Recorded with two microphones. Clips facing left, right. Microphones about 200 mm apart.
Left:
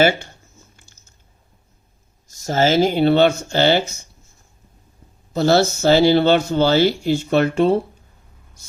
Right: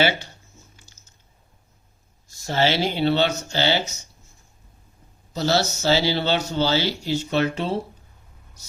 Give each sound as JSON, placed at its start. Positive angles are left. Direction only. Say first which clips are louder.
{"t": 0.0, "sound": "speech", "louder": "left 6 dB", "side_deg": 50}
{"t": 0.8, "sound": "biting", "louder": "left 1 dB", "side_deg": 55}
{"t": 2.4, "sound": "speech", "louder": "left 6 dB", "side_deg": 45}
{"t": 5.3, "sound": "speech", "louder": "left 7 dB", "side_deg": 55}